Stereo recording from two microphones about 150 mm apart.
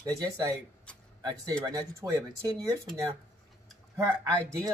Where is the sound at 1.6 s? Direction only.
20° right (ahead or behind).